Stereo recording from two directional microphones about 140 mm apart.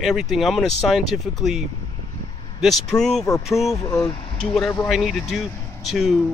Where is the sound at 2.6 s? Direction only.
Centre (ahead or behind).